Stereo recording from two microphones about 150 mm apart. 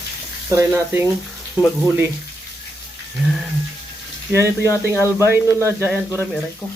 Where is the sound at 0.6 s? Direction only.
15° right (ahead or behind).